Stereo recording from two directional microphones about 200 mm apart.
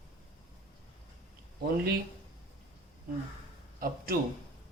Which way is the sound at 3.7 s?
45° right (ahead or behind).